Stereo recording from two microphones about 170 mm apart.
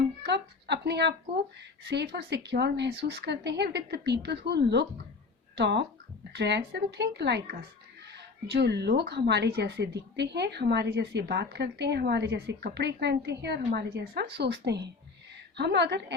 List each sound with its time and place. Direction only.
0.2 s a woman's voice: 90° right
1.8 s speech: 75° right (ahead or behind)
8.1 s speech: 80° right
13.7 s a woman's voice: 65° right (ahead or behind); by 16.1 s 85° right